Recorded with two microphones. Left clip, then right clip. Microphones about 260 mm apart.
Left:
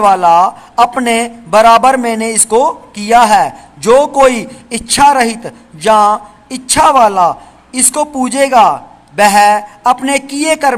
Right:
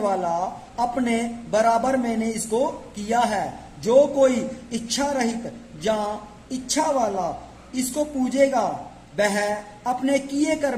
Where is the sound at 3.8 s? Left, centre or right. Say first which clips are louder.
Left 10 dB; left.